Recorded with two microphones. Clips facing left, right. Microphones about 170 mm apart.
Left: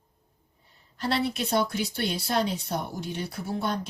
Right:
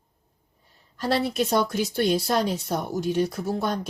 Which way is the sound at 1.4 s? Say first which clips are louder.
Right 4 dB; 50° right (ahead or behind).